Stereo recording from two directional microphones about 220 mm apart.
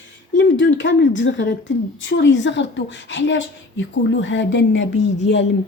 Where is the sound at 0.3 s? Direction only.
55° left (ahead or behind).